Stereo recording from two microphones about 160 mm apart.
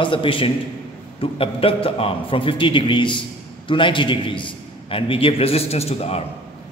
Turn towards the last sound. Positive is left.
turn(degrees=40)  # may be behind; listen again after turning